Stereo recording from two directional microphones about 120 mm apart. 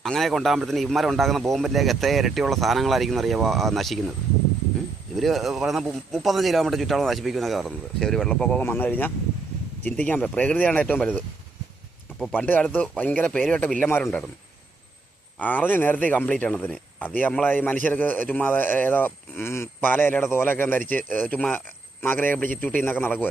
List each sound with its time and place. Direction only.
0.0 s speech: centre (ahead or behind)
5.1 s speech: centre (ahead or behind)
12.4 s speech: 10° left (ahead or behind)
15.4 s speech: 15° left (ahead or behind)